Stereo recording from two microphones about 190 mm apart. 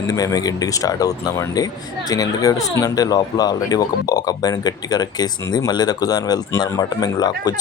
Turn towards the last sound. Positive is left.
turn(degrees=20)  # may be behind; listen again after turning